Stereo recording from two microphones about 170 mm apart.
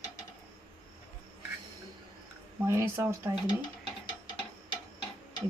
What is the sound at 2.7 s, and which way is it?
Speech, 15° right (ahead or behind).